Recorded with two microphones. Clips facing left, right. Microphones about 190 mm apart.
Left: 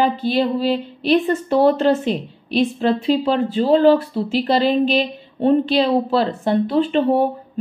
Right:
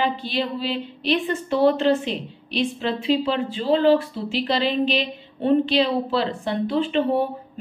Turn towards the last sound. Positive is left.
turn(degrees=40)  # may be behind; listen again after turning